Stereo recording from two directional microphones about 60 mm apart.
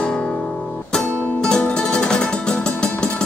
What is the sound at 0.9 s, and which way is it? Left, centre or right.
Music, centre.